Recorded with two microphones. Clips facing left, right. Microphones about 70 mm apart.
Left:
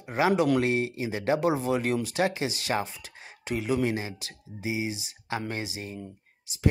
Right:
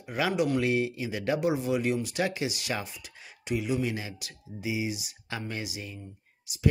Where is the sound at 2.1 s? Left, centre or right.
Left.